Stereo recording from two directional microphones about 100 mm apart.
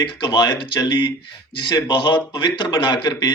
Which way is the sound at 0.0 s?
45° left (ahead or behind).